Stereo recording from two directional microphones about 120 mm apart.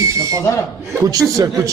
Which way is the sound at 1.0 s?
30° right (ahead or behind).